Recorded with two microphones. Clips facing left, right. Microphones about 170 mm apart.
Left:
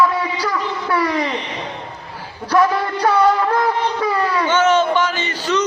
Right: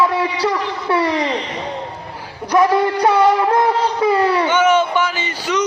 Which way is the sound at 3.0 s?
20° right (ahead or behind).